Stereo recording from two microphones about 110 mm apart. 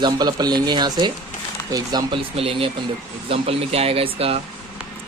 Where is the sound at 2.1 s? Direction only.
55° right (ahead or behind).